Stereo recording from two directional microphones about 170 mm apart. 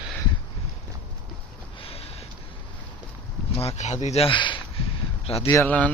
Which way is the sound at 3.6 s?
40° left (ahead or behind).